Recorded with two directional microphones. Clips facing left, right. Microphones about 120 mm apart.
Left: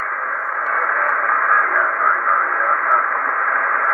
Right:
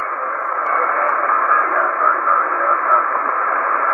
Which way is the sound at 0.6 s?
40° right (ahead or behind).